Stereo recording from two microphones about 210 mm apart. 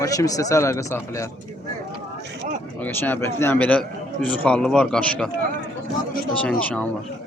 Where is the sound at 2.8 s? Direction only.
10° left (ahead or behind).